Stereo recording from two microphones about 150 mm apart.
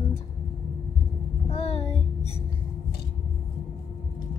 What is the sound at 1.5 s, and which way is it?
Child singing, 45° left (ahead or behind).